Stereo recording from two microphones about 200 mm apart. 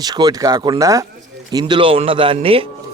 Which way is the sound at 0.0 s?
20° right (ahead or behind).